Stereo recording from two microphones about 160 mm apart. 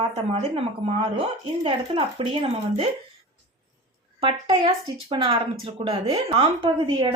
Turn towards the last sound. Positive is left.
turn(degrees=-30)  # may be behind; listen again after turning